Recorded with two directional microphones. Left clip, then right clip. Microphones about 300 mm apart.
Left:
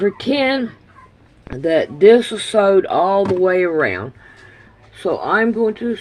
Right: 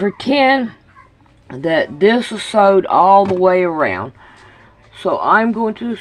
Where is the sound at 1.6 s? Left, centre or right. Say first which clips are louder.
Left 2 dB; right.